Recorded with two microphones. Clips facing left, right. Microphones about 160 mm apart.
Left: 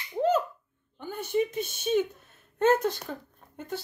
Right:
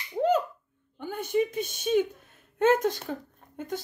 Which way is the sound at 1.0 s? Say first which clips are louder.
Right 1 dB; 50° right (ahead or behind).